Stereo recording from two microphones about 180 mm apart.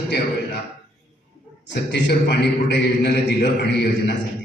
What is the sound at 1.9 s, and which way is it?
A man's voice, 70° left (ahead or behind).